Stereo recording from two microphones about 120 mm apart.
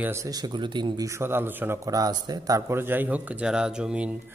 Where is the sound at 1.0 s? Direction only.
20° right (ahead or behind).